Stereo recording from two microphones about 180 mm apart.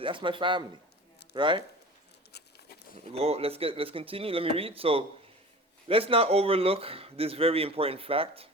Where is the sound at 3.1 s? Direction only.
35° right (ahead or behind).